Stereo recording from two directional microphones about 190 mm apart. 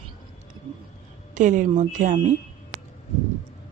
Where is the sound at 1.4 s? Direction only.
40° right (ahead or behind).